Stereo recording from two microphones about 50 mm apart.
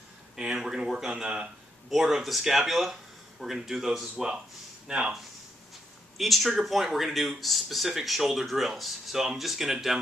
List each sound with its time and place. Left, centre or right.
0.4 s a sound: centre
1.9 s speech: centre
4.8 s speech: centre
6.1 s speech: centre